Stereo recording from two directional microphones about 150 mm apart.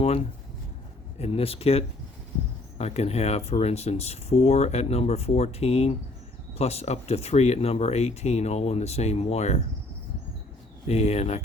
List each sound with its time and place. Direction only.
1.2 s speech: 40° left (ahead or behind)
10.8 s speech: 45° left (ahead or behind)